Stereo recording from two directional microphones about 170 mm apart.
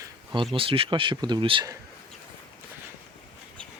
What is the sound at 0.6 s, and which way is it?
Speech, 30° right (ahead or behind).